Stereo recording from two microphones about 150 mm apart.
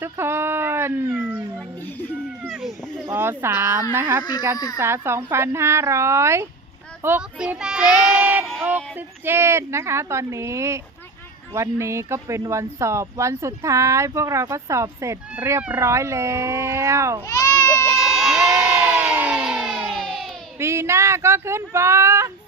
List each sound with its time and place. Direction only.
0.0 s speech: 15° right (ahead or behind)
1.1 s speech: 5° right (ahead or behind)
3.1 s speech: 15° right (ahead or behind)
4.2 s speech: 30° left (ahead or behind)
4.8 s speech: 15° right (ahead or behind)
17.2 s baby cry: 20° left (ahead or behind)
17.8 s crowd: centre (ahead or behind)
20.0 s baby cry: centre (ahead or behind)
20.6 s speech: 15° right (ahead or behind)